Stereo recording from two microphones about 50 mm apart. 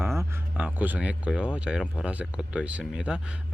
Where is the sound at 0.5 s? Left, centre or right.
Right.